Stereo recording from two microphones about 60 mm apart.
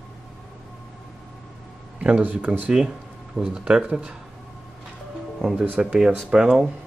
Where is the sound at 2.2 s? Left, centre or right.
Right.